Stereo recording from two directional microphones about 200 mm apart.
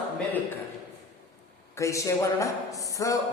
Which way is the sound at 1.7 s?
15° left (ahead or behind).